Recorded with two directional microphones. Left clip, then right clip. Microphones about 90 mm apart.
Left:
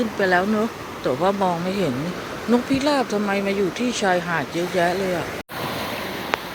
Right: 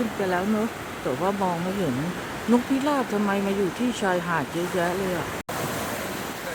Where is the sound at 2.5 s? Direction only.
5° right (ahead or behind).